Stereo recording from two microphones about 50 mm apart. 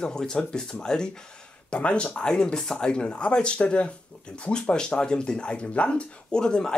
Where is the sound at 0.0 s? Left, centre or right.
Centre.